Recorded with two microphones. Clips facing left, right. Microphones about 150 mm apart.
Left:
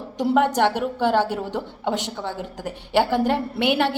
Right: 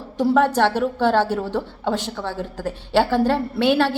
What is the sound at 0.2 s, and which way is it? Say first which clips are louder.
A woman's voice: right 2 dB; 15° left (ahead or behind).